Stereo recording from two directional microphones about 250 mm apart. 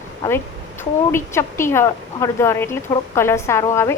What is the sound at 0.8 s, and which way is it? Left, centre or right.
Speech, centre.